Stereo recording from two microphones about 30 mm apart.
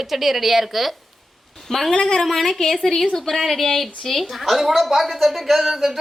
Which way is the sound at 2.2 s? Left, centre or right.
Centre.